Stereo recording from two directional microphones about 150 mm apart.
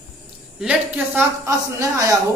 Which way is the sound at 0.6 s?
10° right (ahead or behind).